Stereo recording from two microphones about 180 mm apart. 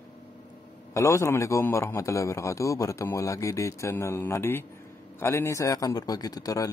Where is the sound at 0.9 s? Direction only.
15° left (ahead or behind).